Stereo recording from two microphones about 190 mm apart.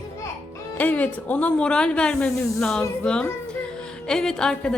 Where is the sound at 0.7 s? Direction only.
10° left (ahead or behind).